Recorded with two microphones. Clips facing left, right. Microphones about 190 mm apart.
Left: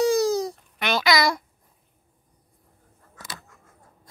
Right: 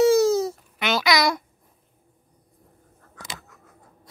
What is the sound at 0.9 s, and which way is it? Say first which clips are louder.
Babbling: even; centre (ahead or behind).